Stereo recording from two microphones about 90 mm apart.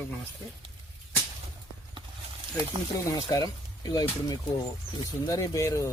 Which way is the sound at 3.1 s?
40° left (ahead or behind).